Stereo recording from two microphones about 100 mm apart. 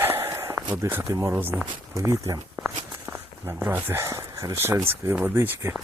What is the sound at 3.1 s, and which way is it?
Speech, 25° right (ahead or behind).